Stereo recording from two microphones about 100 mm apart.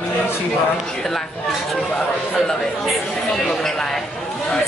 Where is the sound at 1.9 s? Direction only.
5° left (ahead or behind).